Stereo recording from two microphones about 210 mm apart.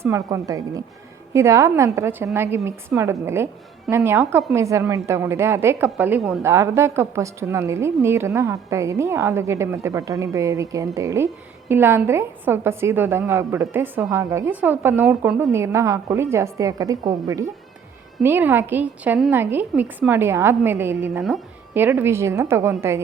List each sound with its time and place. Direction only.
0.0 s a woman's voice: 15° right (ahead or behind)